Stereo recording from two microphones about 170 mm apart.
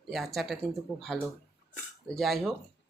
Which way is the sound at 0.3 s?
Centre (ahead or behind).